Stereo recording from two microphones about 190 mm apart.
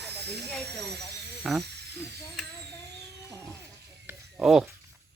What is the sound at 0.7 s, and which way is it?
Speech, 60° right (ahead or behind).